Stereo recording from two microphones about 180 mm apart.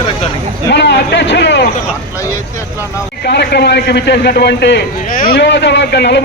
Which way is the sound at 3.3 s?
70° left (ahead or behind).